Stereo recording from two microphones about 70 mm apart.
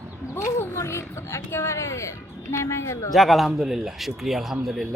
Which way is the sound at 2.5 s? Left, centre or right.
Left.